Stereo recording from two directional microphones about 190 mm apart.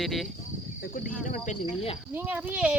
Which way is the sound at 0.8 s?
45° left (ahead or behind).